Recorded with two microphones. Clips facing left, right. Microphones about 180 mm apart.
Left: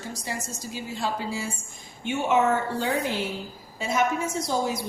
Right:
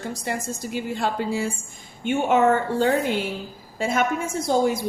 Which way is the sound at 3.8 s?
55° right (ahead or behind).